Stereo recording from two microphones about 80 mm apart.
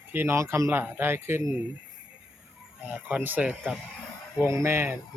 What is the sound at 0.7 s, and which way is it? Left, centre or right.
Speech, right.